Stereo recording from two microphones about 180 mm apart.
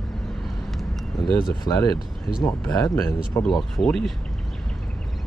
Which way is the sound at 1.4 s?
20° left (ahead or behind).